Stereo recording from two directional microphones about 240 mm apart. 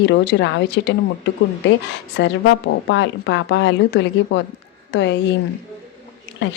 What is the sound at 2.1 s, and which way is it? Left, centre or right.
A woman's voice, left.